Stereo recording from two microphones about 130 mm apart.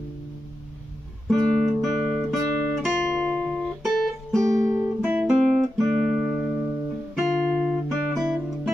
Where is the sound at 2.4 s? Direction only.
20° right (ahead or behind).